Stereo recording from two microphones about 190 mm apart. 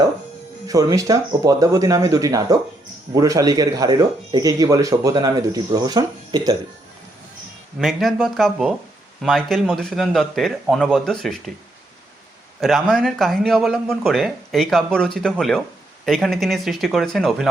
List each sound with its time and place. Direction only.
0.7 s speech: 20° right (ahead or behind)
7.8 s a man's voice: centre (ahead or behind)
12.5 s a man's voice: centre (ahead or behind)